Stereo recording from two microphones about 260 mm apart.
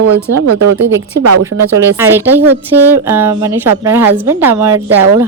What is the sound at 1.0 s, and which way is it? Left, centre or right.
Speech, right.